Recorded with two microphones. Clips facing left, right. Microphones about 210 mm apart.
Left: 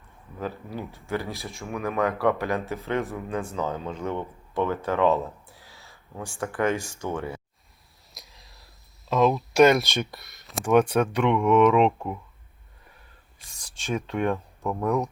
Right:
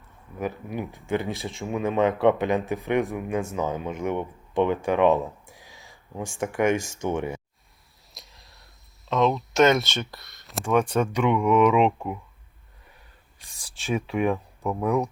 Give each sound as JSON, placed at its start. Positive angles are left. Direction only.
{"t": 0.3, "sound": "speech", "side_deg": -15}
{"t": 5.5, "sound": "a sound", "side_deg": -15}
{"t": 7.0, "sound": "speech", "side_deg": -15}
{"t": 8.1, "sound": "a sound", "side_deg": 0}
{"t": 9.8, "sound": "speech", "side_deg": 15}
{"t": 10.1, "sound": "speech", "side_deg": 0}
{"t": 13.6, "sound": "speech", "side_deg": -5}